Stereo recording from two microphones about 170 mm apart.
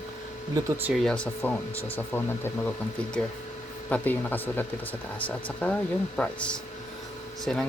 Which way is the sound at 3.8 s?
10° left (ahead or behind).